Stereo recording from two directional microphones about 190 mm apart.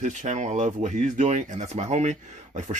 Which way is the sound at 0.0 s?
40° right (ahead or behind).